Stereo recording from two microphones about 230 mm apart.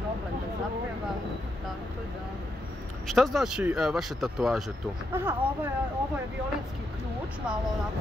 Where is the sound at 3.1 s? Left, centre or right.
Centre.